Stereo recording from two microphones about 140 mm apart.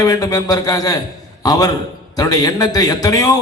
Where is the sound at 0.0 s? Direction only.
25° left (ahead or behind).